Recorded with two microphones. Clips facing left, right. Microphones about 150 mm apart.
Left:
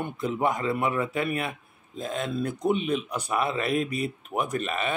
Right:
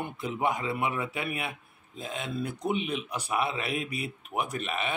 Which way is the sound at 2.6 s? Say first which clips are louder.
Left 6 dB; 45° left (ahead or behind).